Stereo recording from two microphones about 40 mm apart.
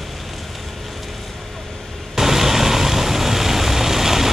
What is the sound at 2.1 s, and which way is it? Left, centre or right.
Vehicle, centre.